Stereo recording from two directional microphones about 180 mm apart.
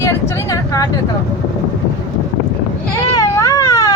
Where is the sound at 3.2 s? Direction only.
20° left (ahead or behind).